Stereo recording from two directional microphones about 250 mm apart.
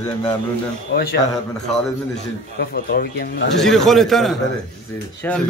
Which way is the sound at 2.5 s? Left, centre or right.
Left.